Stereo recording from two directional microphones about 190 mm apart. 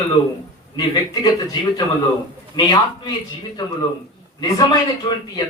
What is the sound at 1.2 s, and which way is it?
A man's voice, 20° left (ahead or behind).